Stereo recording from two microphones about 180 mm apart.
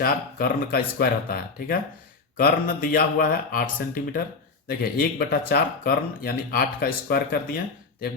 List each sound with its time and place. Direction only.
0.0 s speech: 55° left (ahead or behind)